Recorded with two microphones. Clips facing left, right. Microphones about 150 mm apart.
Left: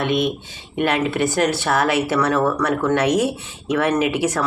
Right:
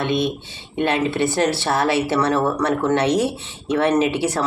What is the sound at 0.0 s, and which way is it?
Speech, 25° right (ahead or behind).